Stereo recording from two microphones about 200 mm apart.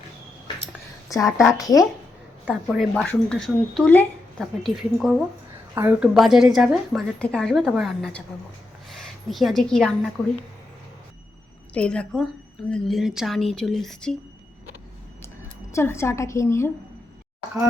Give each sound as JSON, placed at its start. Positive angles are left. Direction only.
{"t": 1.4, "sound": "a woman's voice", "side_deg": 0}
{"t": 1.6, "sound": "a woman's voice", "side_deg": 15}
{"t": 2.5, "sound": "a woman's voice", "side_deg": 0}
{"t": 11.7, "sound": "a woman's voice", "side_deg": 5}
{"t": 15.7, "sound": "a woman's voice", "side_deg": 15}